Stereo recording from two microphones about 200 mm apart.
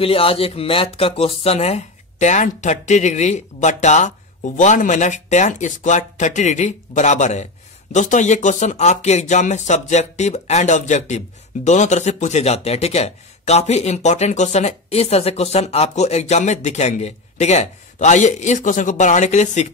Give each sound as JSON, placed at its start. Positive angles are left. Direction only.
{"t": 0.0, "sound": "speech", "side_deg": 30}